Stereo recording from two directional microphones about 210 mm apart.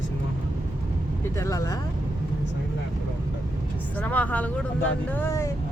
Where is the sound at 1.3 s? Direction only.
15° left (ahead or behind).